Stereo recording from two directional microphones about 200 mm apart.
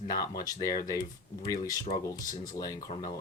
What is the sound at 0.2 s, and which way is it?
Speech, 20° left (ahead or behind).